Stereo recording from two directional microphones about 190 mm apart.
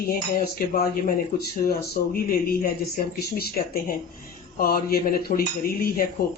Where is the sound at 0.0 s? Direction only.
50° left (ahead or behind).